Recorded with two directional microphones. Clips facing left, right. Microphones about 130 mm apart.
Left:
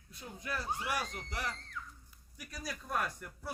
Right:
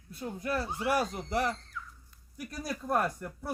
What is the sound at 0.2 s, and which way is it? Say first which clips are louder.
A man's voice: right 8 dB; 50° right (ahead or behind).